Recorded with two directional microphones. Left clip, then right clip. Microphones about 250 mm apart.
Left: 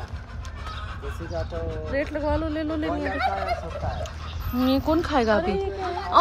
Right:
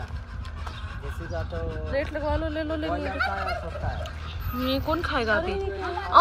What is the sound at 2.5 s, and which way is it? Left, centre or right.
Speech, left.